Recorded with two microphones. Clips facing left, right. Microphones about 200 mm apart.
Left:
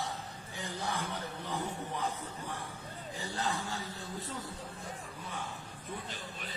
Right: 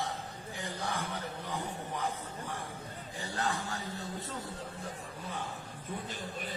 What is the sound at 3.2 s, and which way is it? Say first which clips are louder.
Speech: right 1 dB; 20° left (ahead or behind).